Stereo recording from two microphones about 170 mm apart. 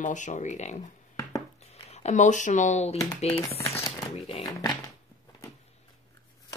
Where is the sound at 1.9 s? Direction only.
45° left (ahead or behind).